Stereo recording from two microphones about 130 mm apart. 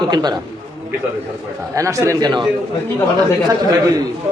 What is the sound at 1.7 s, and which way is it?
Speech, 25° right (ahead or behind).